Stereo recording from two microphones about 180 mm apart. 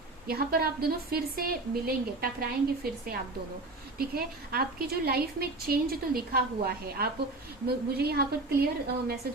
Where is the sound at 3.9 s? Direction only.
55° right (ahead or behind).